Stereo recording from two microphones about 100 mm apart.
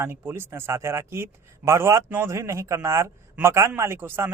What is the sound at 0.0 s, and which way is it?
A man's voice, 25° right (ahead or behind).